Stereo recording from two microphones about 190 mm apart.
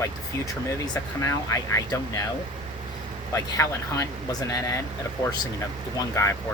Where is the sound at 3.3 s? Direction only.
15° left (ahead or behind).